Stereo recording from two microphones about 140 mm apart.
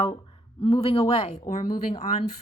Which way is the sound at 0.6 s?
45° left (ahead or behind).